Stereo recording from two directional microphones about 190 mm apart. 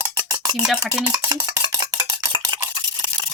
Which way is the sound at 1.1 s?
20° right (ahead or behind).